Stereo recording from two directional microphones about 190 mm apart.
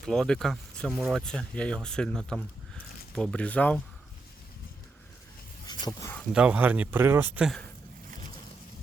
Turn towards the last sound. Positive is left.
turn(degrees=-5)  # may be behind; listen again after turning